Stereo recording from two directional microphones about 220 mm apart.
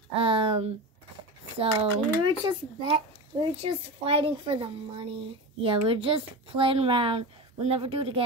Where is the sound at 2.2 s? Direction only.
25° right (ahead or behind).